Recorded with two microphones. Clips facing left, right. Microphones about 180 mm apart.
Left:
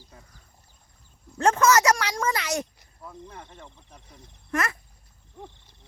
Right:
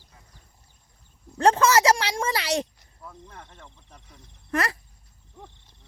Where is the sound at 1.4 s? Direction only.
30° right (ahead or behind).